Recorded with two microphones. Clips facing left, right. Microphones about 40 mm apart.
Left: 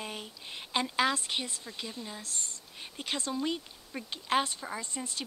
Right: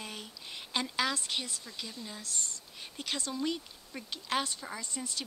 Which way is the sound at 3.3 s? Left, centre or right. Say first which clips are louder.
Left 1 dB; centre.